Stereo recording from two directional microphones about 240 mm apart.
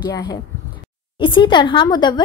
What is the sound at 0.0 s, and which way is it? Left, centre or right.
A woman's voice, centre.